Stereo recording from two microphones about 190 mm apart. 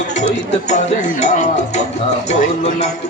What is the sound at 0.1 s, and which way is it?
Speech, 40° left (ahead or behind).